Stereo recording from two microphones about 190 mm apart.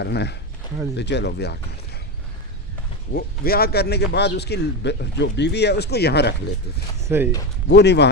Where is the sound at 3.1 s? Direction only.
50° left (ahead or behind).